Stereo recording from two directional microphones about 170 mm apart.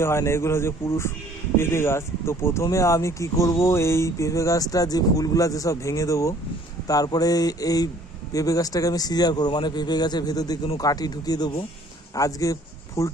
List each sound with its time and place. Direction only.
0.0 s a man's voice: 15° left (ahead or behind)